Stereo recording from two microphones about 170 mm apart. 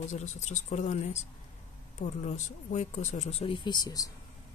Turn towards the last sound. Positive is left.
turn(degrees=25)  # may be behind; listen again after turning